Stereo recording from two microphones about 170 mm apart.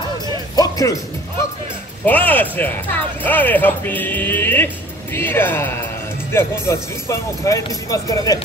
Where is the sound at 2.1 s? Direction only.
10° left (ahead or behind).